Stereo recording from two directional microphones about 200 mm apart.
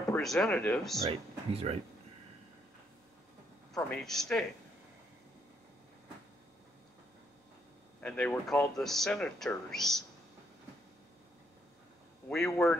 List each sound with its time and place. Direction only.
0.1 s speech: centre (ahead or behind)
1.0 s speech: 30° right (ahead or behind)
4.0 s speech: centre (ahead or behind)
8.0 s speech: 5° left (ahead or behind)
12.3 s speech: 5° left (ahead or behind)